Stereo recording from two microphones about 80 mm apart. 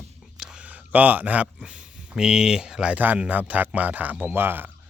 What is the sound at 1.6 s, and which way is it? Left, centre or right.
Speech, centre.